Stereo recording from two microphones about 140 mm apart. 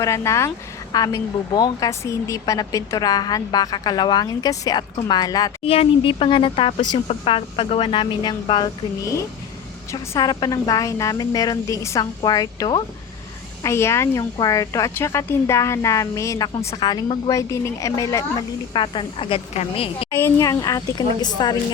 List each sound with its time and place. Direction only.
0.0 s a woman's voice: 20° left (ahead or behind)
5.6 s speech: 45° left (ahead or behind)
9.9 s a woman's voice: 25° left (ahead or behind)
18.7 s speech: 35° left (ahead or behind)
20.2 s a woman's voice: 25° left (ahead or behind)